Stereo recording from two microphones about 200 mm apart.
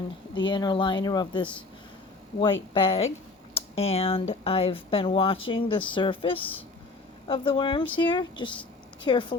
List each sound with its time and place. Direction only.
0.3 s speech: 25° left (ahead or behind)